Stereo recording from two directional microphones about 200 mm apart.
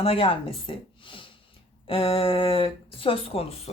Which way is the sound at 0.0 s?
30° left (ahead or behind).